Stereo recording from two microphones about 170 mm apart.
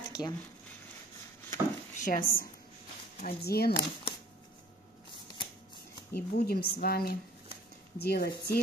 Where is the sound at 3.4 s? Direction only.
70° left (ahead or behind).